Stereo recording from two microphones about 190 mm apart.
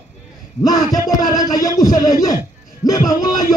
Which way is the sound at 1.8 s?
20° left (ahead or behind).